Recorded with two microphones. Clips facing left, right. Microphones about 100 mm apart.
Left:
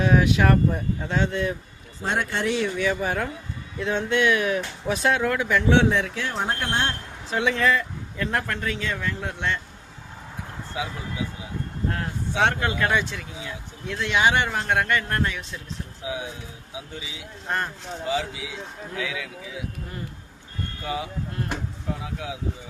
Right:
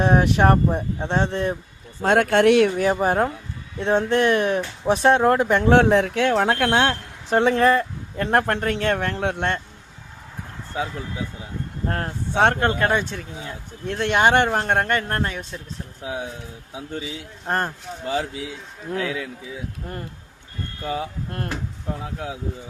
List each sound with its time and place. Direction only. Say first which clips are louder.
0.0 s speech: right 3 dB; 40° right (ahead or behind)
2.0 s speech: right 9 dB; 65° right (ahead or behind)
2.7 s speech: right 5 dB; 40° right (ahead or behind)
6.2 s speech: right 8 dB; 90° right
7.3 s speech: right 5 dB; 45° right (ahead or behind)
11.9 s speech: right 3 dB; 45° right (ahead or behind)
13.8 s speech: right 3 dB; 50° right (ahead or behind)
16.7 s speech: right 6 dB; 50° right (ahead or behind)
20.9 s speech: right 2 dB; 50° right (ahead or behind)